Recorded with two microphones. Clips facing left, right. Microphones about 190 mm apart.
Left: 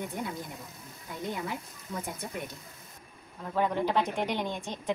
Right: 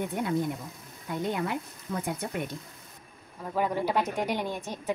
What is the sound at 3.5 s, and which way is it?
Speech, 10° right (ahead or behind).